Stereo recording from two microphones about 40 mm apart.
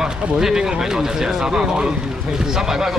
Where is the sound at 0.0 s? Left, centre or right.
Centre.